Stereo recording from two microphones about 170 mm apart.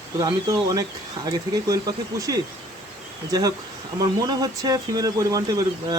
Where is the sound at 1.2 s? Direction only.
20° right (ahead or behind).